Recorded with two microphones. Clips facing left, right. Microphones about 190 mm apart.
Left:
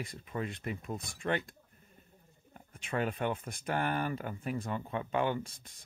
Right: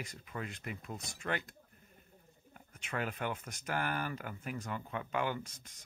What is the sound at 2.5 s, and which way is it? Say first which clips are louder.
Speech: left 5 dB; 30° left (ahead or behind).